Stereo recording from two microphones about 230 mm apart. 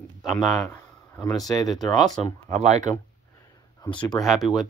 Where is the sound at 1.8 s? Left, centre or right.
Centre.